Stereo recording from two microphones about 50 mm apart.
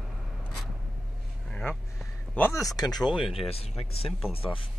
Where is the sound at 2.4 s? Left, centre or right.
Left.